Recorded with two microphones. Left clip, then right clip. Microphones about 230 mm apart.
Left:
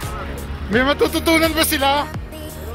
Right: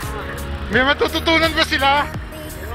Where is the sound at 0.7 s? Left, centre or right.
Left.